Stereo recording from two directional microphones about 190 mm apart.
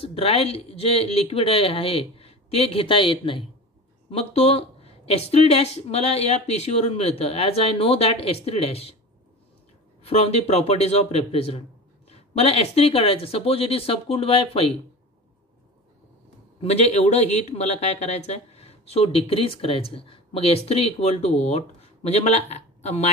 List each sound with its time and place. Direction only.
0.0 s speech: 30° left (ahead or behind)
10.0 s speech: 30° left (ahead or behind)
16.6 s speech: 35° left (ahead or behind)